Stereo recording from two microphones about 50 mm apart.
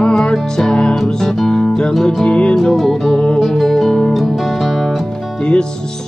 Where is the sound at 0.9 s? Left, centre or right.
Centre.